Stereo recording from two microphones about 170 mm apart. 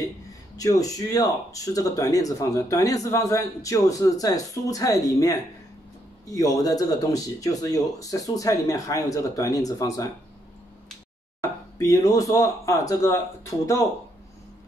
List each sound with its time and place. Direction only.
0.6 s speech: 20° left (ahead or behind)
11.8 s speech: 20° left (ahead or behind)